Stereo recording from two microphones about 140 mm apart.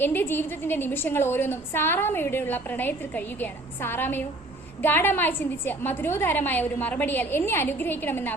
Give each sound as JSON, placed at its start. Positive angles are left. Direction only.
{"t": 0.0, "sound": "a woman's voice", "side_deg": 15}